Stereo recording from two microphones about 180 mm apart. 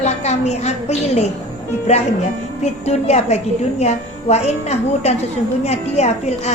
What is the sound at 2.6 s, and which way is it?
A woman's voice, 40° left (ahead or behind).